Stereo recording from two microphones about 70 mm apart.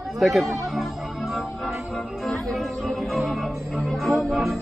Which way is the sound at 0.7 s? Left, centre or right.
Centre.